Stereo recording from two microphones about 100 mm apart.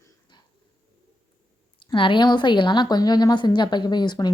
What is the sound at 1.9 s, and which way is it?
A woman's voice, 55° left (ahead or behind).